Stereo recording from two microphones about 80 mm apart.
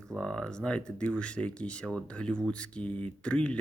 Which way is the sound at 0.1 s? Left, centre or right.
Centre.